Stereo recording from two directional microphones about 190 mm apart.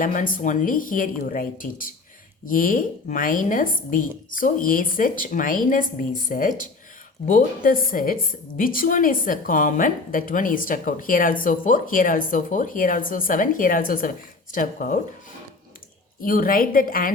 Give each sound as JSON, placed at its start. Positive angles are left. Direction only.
{"t": 0.0, "sound": "a woman's voice", "side_deg": 45}
{"t": 16.2, "sound": "a woman's voice", "side_deg": 50}